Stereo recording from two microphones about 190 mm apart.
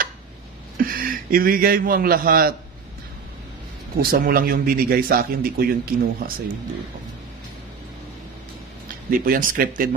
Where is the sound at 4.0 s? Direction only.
50° right (ahead or behind).